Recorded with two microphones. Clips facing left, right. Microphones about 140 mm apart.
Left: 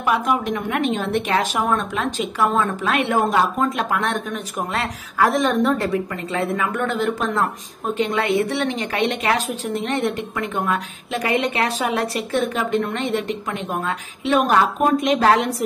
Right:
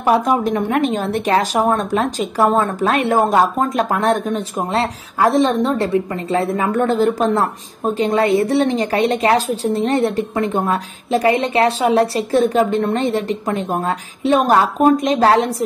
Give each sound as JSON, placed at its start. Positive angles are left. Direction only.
{"t": 0.0, "sound": "a woman's voice", "side_deg": -35}